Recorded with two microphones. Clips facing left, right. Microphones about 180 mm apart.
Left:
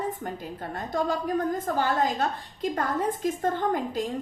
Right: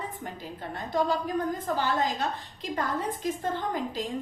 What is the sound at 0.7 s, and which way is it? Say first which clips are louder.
A woman's voice: even; 45° left (ahead or behind).